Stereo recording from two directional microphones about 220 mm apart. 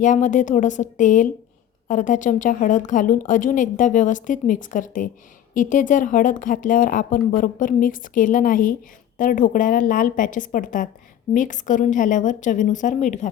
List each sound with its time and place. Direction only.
0.0 s a woman's voice: 35° left (ahead or behind)